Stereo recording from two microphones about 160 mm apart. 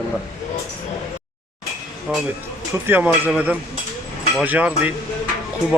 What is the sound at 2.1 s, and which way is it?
Speech, 5° right (ahead or behind).